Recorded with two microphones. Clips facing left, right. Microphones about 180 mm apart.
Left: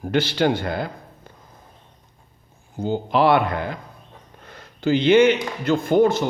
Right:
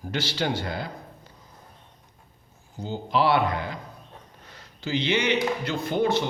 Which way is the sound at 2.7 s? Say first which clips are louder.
Left 5 dB; 55° left (ahead or behind).